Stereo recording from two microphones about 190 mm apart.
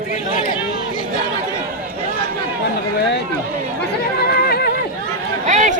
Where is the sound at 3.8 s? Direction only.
55° left (ahead or behind).